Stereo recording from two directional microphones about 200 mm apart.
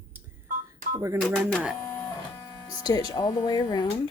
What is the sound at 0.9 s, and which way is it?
Speech, 15° right (ahead or behind).